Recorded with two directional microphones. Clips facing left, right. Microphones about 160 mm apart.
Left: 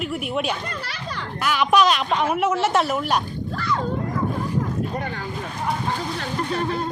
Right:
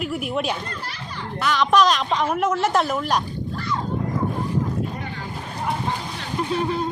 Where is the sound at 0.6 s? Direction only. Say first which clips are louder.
Left 2 dB; 90° left.